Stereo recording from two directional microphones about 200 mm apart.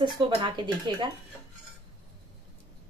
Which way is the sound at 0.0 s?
20° right (ahead or behind).